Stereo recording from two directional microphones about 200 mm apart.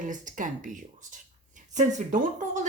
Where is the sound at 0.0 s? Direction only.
40° right (ahead or behind).